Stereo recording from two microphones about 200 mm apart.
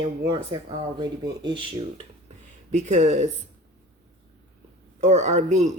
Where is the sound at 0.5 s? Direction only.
20° right (ahead or behind).